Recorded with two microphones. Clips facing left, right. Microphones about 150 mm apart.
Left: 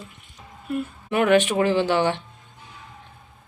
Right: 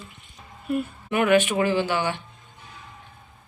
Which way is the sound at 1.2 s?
10° right (ahead or behind).